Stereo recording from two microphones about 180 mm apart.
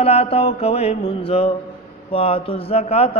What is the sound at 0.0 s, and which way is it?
Mantra, 35° left (ahead or behind).